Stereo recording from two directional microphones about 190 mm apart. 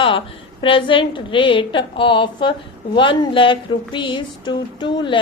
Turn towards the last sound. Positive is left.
turn(degrees=25)  # may be behind; listen again after turning